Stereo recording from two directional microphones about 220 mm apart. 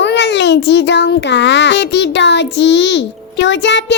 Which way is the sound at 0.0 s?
50° left (ahead or behind).